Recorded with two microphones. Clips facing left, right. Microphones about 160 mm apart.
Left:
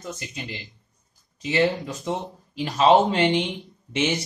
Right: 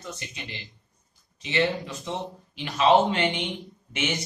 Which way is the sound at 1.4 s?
40° left (ahead or behind).